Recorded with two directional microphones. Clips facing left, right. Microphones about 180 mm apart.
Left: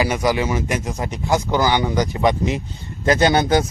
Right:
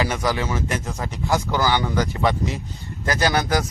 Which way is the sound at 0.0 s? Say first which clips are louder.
Left 4 dB; 10° left (ahead or behind).